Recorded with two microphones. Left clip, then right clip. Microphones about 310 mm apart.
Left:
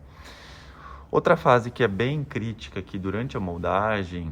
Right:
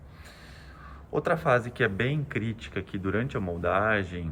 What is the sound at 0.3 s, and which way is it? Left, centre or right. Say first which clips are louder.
Speech: left 5 dB; centre.